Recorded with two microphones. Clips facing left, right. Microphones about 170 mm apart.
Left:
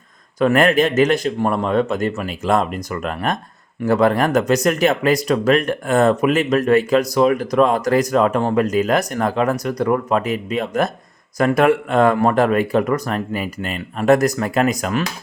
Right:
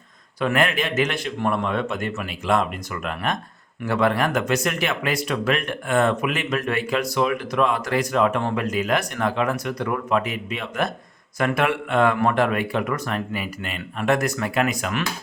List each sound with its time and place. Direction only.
0.3 s speech: 45° left (ahead or behind)